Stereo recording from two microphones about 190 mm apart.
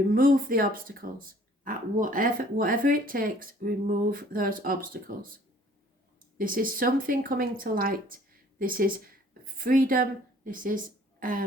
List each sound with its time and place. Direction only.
0.1 s a woman's voice: 45° right (ahead or behind)